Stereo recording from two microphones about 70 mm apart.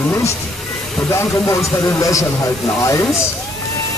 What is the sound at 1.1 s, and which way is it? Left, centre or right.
A man's voice, left.